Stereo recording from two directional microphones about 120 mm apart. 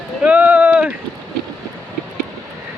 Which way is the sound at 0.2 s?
10° right (ahead or behind).